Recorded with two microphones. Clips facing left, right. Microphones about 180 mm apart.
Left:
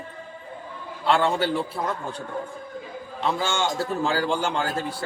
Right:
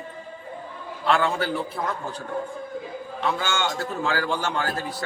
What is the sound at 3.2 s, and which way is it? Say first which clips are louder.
A man's voice: left 1 dB; 30° left (ahead or behind).